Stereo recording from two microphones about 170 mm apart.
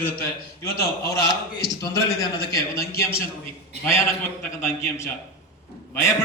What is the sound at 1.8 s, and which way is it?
A man's voice, 20° left (ahead or behind).